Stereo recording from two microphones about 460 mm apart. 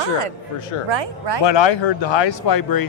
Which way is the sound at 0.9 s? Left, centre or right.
Right.